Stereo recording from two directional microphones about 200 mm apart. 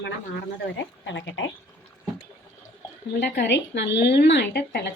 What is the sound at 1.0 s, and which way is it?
Speech, 65° left (ahead or behind).